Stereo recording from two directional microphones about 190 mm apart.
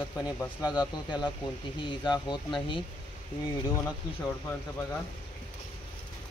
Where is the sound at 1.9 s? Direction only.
25° left (ahead or behind).